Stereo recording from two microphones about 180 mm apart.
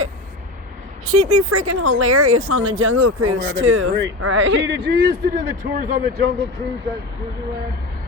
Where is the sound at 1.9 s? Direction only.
90° right; by 5.8 s 50° right (ahead or behind).